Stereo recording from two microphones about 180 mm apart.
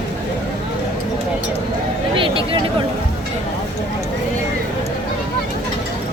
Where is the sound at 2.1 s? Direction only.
30° right (ahead or behind).